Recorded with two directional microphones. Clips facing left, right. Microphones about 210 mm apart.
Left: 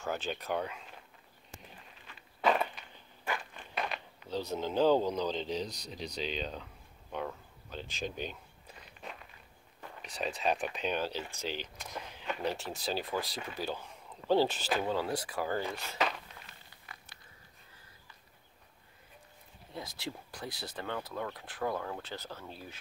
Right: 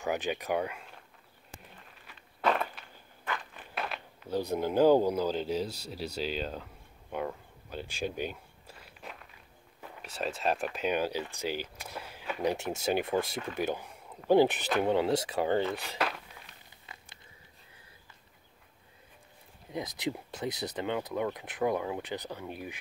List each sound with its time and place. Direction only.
0.0 s speech: 15° right (ahead or behind)
2.4 s walk: centre (ahead or behind)
3.5 s a sound: 5° right (ahead or behind)
4.4 s speech: 10° right (ahead or behind)
15.7 s speech: 15° right (ahead or behind)
16.4 s a sound: centre (ahead or behind)
19.7 s speech: 20° right (ahead or behind)